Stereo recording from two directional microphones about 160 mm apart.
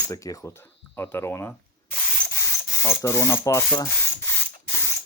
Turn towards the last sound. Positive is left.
turn(degrees=15)  # may be behind; listen again after turning